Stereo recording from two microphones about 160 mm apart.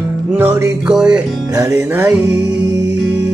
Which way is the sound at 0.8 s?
5° right (ahead or behind).